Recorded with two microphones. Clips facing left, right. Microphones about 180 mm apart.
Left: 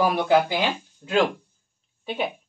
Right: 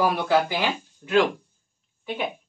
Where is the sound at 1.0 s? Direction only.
25° left (ahead or behind).